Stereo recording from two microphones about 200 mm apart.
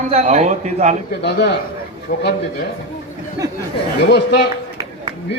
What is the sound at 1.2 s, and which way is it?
Speech, 60° left (ahead or behind).